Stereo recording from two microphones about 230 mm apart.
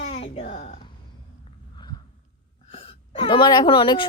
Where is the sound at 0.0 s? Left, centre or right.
Left.